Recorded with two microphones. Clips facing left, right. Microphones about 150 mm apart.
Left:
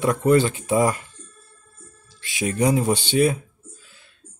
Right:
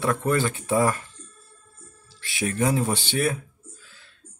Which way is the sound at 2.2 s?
20° left (ahead or behind).